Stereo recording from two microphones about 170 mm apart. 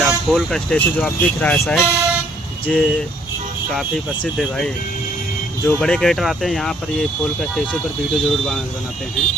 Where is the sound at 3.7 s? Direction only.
5° right (ahead or behind).